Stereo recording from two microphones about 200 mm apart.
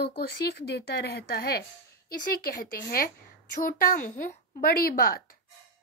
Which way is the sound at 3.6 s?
45° left (ahead or behind).